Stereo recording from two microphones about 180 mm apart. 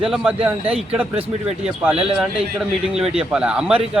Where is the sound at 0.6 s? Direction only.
35° right (ahead or behind).